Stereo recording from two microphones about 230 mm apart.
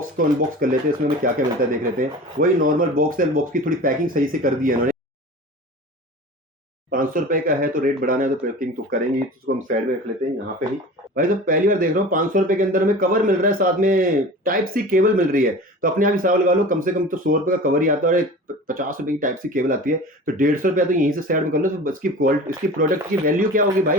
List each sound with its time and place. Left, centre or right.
0.0 s speech: right
6.9 s speech: right
11.1 s speech: right